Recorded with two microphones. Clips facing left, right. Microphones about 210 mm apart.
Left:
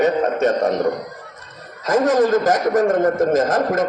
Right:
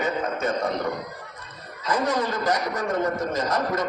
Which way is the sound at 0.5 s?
45° left (ahead or behind).